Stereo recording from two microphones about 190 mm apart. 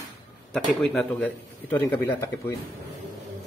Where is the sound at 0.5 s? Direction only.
Centre (ahead or behind).